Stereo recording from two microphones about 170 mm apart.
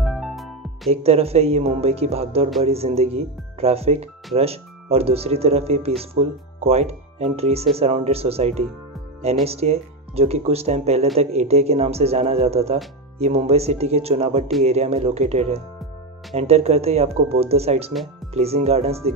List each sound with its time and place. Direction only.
0.0 s music: centre (ahead or behind)
1.0 s speech: 35° right (ahead or behind)